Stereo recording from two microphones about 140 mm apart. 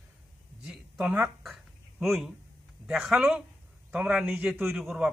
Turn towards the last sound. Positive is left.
turn(degrees=0)  # may be behind; listen again after turning